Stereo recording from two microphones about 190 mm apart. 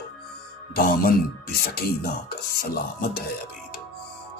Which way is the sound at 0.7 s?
50° left (ahead or behind).